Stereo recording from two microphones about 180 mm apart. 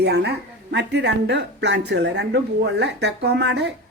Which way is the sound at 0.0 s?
70° right (ahead or behind).